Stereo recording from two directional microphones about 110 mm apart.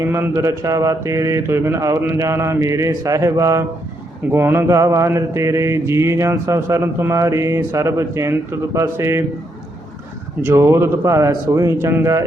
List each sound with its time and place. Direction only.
0.0 s mantra: 20° right (ahead or behind)
10.4 s mantra: 25° right (ahead or behind)